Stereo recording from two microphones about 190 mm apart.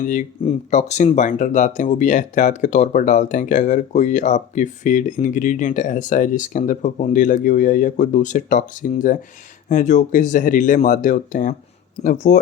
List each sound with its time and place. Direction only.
0.0 s speech: 40° left (ahead or behind)